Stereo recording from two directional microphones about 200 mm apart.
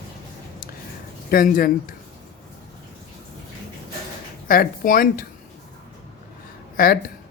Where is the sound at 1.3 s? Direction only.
45° left (ahead or behind).